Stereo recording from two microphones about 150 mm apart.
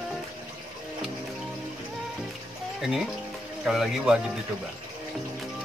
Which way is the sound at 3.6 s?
Centre (ahead or behind).